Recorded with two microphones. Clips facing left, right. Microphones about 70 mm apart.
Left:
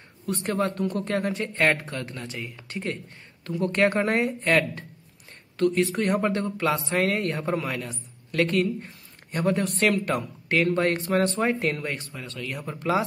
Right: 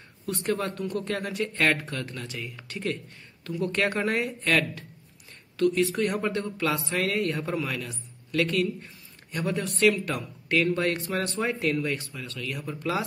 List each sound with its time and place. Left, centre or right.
0.3 s speech: left